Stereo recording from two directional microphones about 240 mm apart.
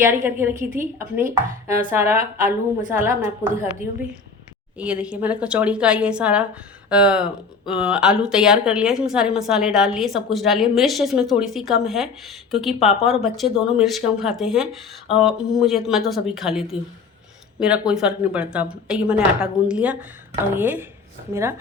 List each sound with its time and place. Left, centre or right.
0.0 s speech: centre
4.8 s a woman's voice: centre